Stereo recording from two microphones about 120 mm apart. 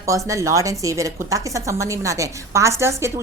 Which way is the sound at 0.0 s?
25° right (ahead or behind).